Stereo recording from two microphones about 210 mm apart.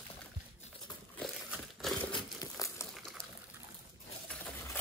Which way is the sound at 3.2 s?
25° left (ahead or behind).